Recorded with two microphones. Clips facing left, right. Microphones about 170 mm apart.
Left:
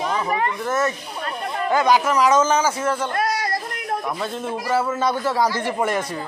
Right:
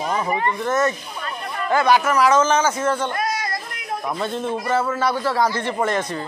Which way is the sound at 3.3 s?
35° left (ahead or behind).